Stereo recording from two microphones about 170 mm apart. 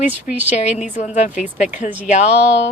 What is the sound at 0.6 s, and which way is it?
Speech, 40° left (ahead or behind).